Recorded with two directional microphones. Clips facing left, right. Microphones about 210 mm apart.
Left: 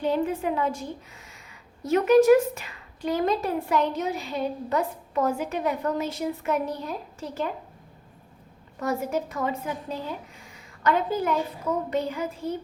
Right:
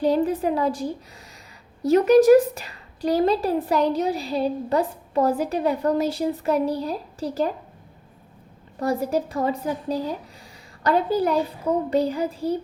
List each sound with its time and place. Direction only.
0.0 s a woman's voice: 35° right (ahead or behind)
8.8 s a woman's voice: 35° right (ahead or behind)